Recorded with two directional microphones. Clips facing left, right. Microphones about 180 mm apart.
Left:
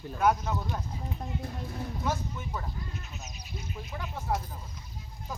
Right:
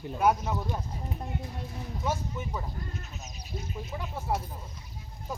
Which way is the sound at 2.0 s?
10° right (ahead or behind).